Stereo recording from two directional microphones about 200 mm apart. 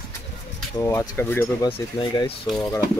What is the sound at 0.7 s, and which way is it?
Speech, 15° left (ahead or behind).